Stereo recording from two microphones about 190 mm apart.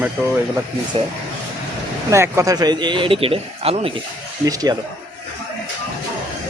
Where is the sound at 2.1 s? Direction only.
15° right (ahead or behind); by 3.9 s 30° right (ahead or behind).